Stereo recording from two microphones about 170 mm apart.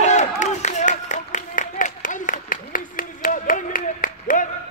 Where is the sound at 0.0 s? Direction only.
45° left (ahead or behind).